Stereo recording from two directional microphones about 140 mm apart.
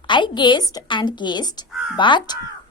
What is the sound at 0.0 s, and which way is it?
A woman's voice, 35° left (ahead or behind).